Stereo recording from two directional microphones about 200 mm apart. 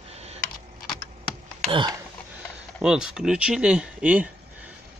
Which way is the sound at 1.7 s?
25° right (ahead or behind).